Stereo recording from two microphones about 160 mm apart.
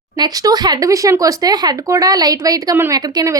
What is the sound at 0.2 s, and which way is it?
A woman's voice, 25° right (ahead or behind).